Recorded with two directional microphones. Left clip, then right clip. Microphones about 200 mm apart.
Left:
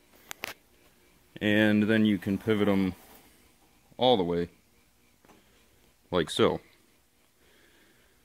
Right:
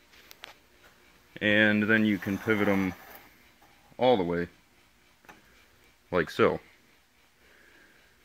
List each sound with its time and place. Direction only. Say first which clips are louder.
1.3 s speech: right 2 dB; 25° left (ahead or behind)
3.9 s speech: even; 10° left (ahead or behind)
6.0 s speech: right 1 dB; 5° left (ahead or behind)